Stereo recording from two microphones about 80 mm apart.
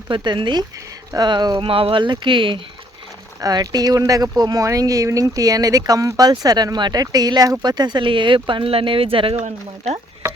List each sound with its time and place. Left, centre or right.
0.1 s speech: right
1.1 s speech: right
3.4 s speech: right
10.2 s a sound: right